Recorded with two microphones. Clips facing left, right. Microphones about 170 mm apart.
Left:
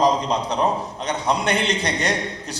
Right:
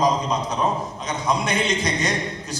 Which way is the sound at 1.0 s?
65° left (ahead or behind).